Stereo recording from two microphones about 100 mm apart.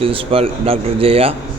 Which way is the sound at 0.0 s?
65° right (ahead or behind).